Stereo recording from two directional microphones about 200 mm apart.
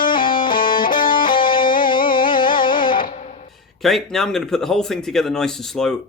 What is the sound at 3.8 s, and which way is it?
Speech, centre (ahead or behind).